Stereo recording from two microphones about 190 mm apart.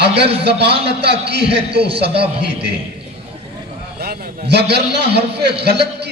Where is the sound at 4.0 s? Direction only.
55° right (ahead or behind).